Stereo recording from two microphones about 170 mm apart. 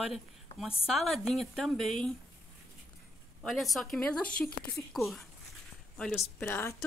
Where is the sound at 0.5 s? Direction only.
40° left (ahead or behind).